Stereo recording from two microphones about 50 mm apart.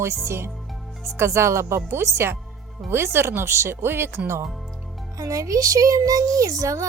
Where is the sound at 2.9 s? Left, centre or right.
Right.